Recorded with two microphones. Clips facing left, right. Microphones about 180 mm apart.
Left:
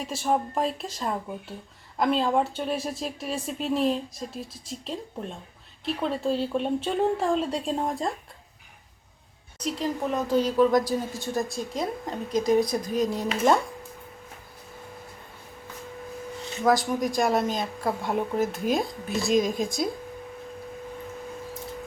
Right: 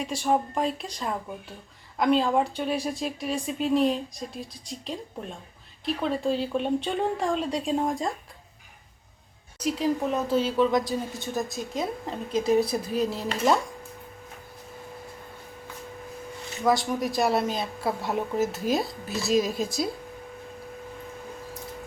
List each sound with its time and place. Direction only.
0.0 s speech: centre (ahead or behind)
9.8 s speech: 5° right (ahead or behind)
12.3 s speech: 30° right (ahead or behind)
12.5 s speech: 10° right (ahead or behind)
16.6 s speech: centre (ahead or behind)